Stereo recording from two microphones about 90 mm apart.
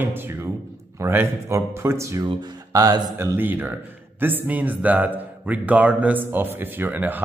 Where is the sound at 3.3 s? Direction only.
20° right (ahead or behind).